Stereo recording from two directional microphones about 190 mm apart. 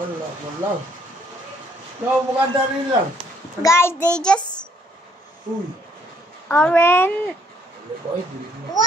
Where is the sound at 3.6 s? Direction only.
15° left (ahead or behind).